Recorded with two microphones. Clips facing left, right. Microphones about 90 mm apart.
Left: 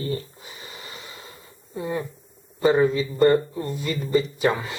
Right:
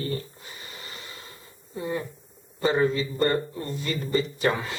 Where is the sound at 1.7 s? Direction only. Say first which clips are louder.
Left 2 dB; 15° left (ahead or behind).